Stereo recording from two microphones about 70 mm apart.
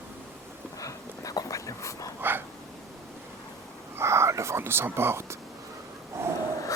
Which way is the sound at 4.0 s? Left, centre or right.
Right.